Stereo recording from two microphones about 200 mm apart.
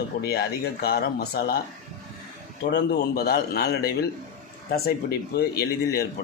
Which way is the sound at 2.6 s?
50° left (ahead or behind).